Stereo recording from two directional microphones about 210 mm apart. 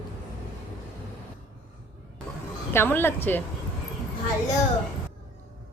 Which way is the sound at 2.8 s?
10° left (ahead or behind).